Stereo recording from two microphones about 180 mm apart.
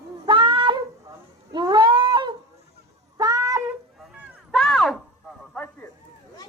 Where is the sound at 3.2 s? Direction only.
20° right (ahead or behind).